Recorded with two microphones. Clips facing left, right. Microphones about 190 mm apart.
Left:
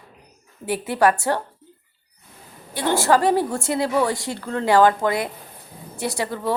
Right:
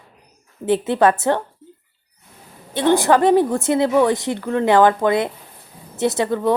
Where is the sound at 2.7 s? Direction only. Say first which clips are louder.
Right 4 dB; 20° right (ahead or behind).